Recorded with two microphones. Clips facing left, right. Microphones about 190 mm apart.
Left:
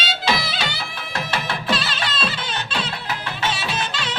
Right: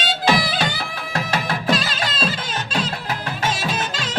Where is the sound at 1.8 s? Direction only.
45° right (ahead or behind).